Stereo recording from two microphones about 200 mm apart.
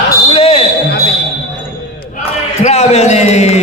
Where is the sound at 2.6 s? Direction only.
35° left (ahead or behind).